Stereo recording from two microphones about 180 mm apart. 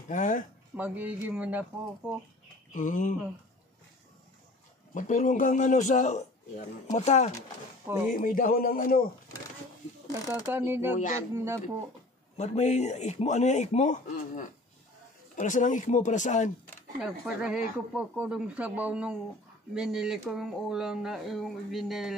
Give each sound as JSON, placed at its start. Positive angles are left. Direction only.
{"t": 0.1, "sound": "a man's voice", "side_deg": 45}
{"t": 0.7, "sound": "speech", "side_deg": -10}
{"t": 2.7, "sound": "a man's voice", "side_deg": 45}
{"t": 4.9, "sound": "a man's voice", "side_deg": 45}
{"t": 8.1, "sound": "a man's voice", "side_deg": 50}
{"t": 10.5, "sound": "speech", "side_deg": -10}
{"t": 12.4, "sound": "a man's voice", "side_deg": 40}
{"t": 17.0, "sound": "speech", "side_deg": -5}